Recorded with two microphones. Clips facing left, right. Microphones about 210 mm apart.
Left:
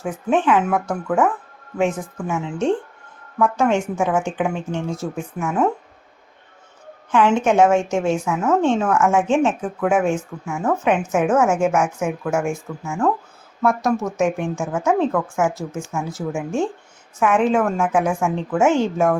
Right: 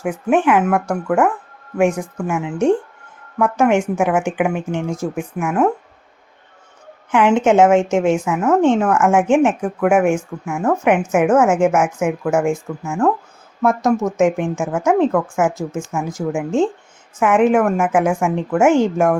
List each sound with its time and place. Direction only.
0.0 s speech: 15° right (ahead or behind)
7.1 s speech: 15° right (ahead or behind)
13.6 s speech: 20° right (ahead or behind)